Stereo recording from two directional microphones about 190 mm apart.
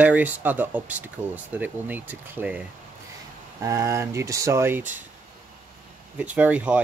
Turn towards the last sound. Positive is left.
turn(degrees=-10)  # may be behind; listen again after turning